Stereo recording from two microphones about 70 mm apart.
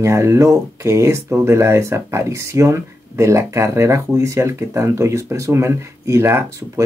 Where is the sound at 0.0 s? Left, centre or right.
Right.